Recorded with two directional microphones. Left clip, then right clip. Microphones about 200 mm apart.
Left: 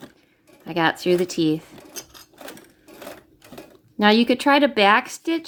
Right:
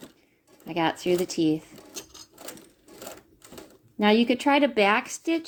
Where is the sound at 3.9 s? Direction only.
20° left (ahead or behind).